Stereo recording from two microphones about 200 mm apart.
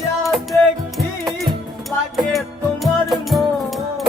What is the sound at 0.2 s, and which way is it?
Music, centre (ahead or behind).